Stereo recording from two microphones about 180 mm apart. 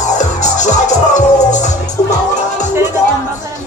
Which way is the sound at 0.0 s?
40° left (ahead or behind).